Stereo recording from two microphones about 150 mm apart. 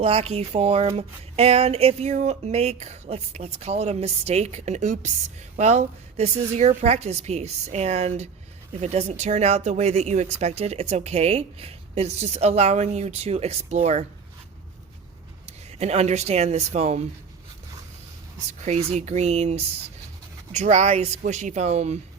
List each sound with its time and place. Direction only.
0.0 s speech: 40° right (ahead or behind)
15.4 s speech: 45° right (ahead or behind)
18.6 s speech: 45° right (ahead or behind)